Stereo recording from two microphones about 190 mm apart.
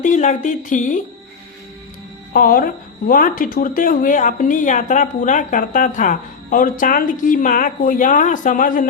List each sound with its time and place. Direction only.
0.0 s speech: 40° left (ahead or behind)
2.3 s speech: 50° left (ahead or behind)